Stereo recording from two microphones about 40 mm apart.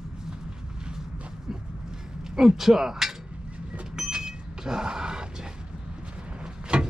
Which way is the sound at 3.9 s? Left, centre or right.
Centre.